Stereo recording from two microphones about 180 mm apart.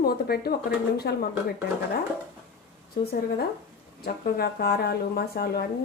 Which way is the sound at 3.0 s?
60° left (ahead or behind).